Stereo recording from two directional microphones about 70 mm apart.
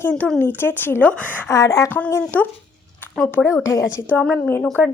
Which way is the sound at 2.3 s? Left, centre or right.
Left.